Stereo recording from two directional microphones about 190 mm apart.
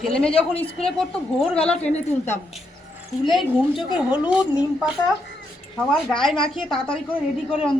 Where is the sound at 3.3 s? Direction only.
Centre (ahead or behind).